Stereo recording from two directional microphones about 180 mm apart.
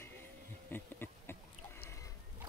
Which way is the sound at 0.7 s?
10° left (ahead or behind).